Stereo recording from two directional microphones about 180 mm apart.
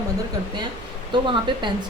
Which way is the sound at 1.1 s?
25° right (ahead or behind).